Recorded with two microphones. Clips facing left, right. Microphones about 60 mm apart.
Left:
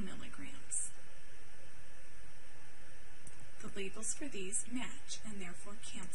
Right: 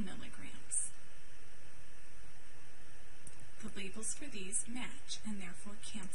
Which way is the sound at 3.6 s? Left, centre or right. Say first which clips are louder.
Even; left.